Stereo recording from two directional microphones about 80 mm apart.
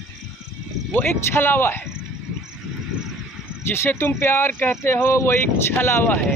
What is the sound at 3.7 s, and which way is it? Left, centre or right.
Speech, left.